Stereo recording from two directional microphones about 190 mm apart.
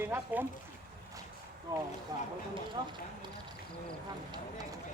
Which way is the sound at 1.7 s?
20° right (ahead or behind).